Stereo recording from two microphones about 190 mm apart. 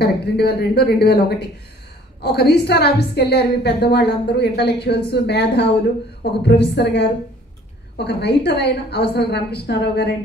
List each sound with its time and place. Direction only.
0.0 s a woman's voice: 60° left (ahead or behind)